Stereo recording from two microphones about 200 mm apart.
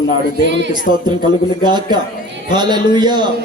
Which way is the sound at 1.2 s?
20° right (ahead or behind).